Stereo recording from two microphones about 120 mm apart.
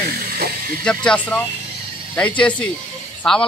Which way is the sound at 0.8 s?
10° left (ahead or behind).